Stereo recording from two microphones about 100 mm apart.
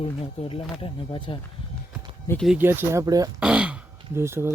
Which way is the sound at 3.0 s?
35° right (ahead or behind).